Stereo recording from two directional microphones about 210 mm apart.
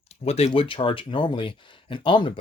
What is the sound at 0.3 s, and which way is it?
Speech, 30° left (ahead or behind).